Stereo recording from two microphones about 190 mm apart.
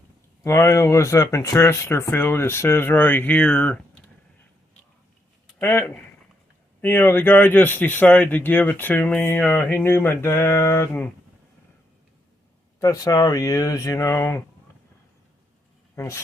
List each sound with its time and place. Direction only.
0.4 s speech: 15° left (ahead or behind)
5.5 s speech: 10° left (ahead or behind)
12.8 s speech: 15° left (ahead or behind)
16.0 s speech: 15° left (ahead or behind)